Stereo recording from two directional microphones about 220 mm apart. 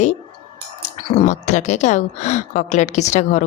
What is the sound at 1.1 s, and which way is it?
A woman's voice, 30° left (ahead or behind).